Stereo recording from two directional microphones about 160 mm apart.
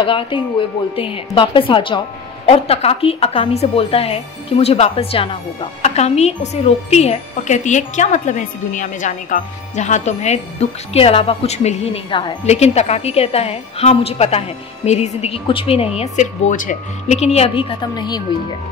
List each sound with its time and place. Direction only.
0.0 s a woman's voice: 30° left (ahead or behind)
16.0 s a woman's voice: 50° left (ahead or behind); by 18.2 s 25° left (ahead or behind)